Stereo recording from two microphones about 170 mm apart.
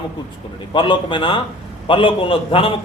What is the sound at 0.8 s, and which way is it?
A man's voice, 30° left (ahead or behind).